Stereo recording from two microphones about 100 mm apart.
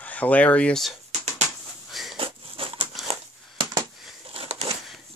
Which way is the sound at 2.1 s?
65° right (ahead or behind).